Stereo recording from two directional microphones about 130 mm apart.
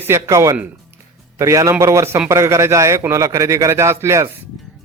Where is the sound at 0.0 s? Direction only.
20° right (ahead or behind).